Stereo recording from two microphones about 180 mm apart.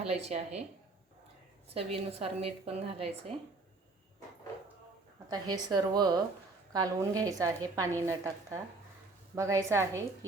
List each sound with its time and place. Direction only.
0.0 s a woman's voice: 35° right (ahead or behind)
1.7 s a woman's voice: 35° right (ahead or behind)
5.3 s a woman's voice: 20° right (ahead or behind)